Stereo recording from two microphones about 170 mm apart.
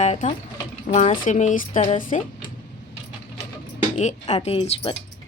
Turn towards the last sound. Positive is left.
turn(degrees=35)  # may be behind; listen again after turning